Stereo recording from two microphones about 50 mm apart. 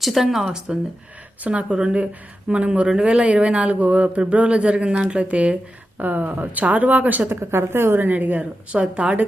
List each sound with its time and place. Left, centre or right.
0.0 s speech: centre
1.5 s speech: right
7.3 s speech: right
8.0 s speech: right